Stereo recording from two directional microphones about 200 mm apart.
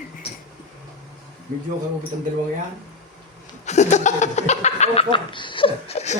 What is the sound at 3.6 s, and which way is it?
Speech, 35° left (ahead or behind).